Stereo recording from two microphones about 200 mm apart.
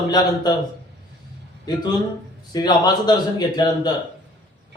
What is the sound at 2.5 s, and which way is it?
Speech, 20° left (ahead or behind).